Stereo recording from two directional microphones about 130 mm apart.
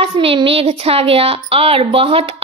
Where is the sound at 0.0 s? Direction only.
45° right (ahead or behind).